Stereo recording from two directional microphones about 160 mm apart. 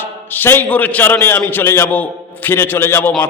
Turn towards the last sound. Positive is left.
turn(degrees=15)  # may be behind; listen again after turning